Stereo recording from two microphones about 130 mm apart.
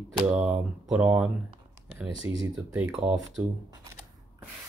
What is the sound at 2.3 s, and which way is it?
Speech, 20° right (ahead or behind).